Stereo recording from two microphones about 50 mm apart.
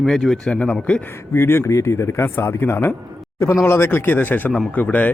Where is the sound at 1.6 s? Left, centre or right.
Left.